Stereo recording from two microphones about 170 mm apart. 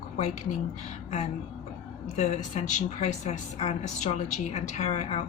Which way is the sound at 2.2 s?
40° left (ahead or behind).